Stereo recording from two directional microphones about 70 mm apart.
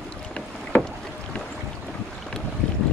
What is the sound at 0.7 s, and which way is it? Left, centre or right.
Boat, left.